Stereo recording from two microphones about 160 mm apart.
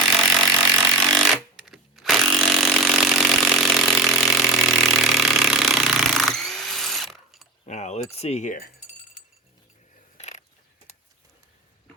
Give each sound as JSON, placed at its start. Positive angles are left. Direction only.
{"t": 0.1, "sound": "vehicle", "side_deg": -10}
{"t": 0.4, "sound": "a sound", "side_deg": -15}
{"t": 1.2, "sound": "chainsaw", "side_deg": 0}
{"t": 4.3, "sound": "engine", "side_deg": 0}
{"t": 7.6, "sound": "keys jangling", "side_deg": 45}
{"t": 8.1, "sound": "speech", "side_deg": 40}
{"t": 10.2, "sound": "a sound", "side_deg": 45}